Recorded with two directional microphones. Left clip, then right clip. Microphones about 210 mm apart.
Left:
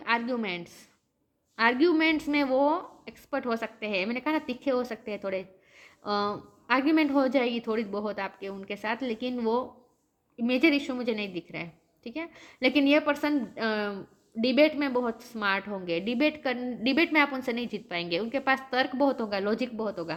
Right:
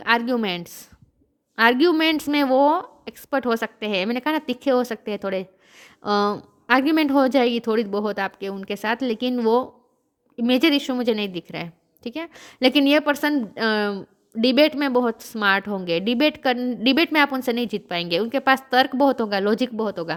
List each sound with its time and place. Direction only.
0.0 s a woman's voice: 50° right (ahead or behind)